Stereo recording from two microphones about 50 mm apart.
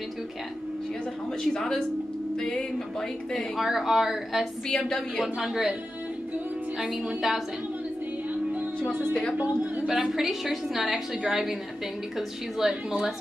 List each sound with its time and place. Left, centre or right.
1.4 s music: centre
3.5 s a woman's voice: centre
4.6 s music: centre
5.2 s a woman's voice: centre
6.9 s a woman's voice: centre
7.2 s a woman's voice: centre
9.8 s a woman's voice: centre